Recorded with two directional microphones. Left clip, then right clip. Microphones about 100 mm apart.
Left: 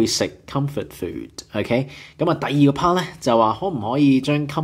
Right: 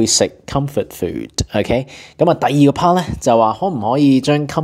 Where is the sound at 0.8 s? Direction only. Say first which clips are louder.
Right 8 dB; 50° right (ahead or behind).